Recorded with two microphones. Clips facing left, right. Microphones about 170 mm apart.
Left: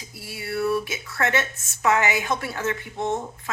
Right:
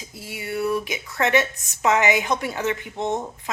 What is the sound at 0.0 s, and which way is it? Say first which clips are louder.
A woman's voice: right 2 dB; 20° right (ahead or behind).